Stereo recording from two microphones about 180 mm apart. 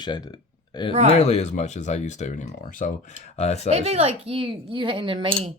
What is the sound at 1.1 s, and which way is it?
Speech, 40° left (ahead or behind).